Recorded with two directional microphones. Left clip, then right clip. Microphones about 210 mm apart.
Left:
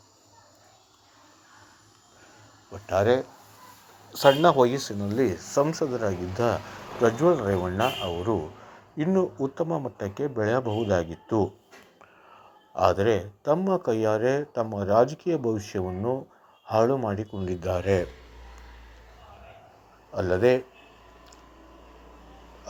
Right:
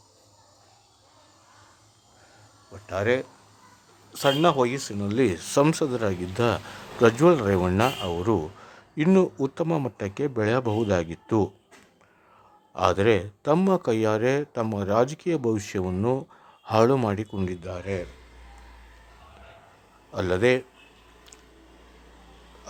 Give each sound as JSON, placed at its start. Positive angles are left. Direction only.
{"t": 2.8, "sound": "speech", "side_deg": 0}
{"t": 4.1, "sound": "speech", "side_deg": -10}
{"t": 5.5, "sound": "speech", "side_deg": -25}
{"t": 12.7, "sound": "speech", "side_deg": -20}
{"t": 17.6, "sound": "speech", "side_deg": 5}
{"t": 20.1, "sound": "speech", "side_deg": -20}